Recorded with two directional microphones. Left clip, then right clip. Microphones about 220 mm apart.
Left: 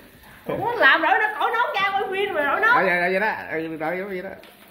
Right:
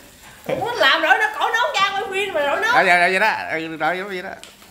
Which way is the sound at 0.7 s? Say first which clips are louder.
Right 1 dB; 50° right (ahead or behind).